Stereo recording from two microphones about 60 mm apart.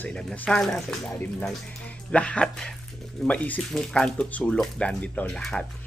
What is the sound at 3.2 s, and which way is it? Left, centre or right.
Speech, left.